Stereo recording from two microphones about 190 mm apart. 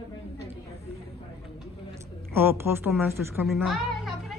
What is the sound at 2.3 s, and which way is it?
Speech, 10° right (ahead or behind).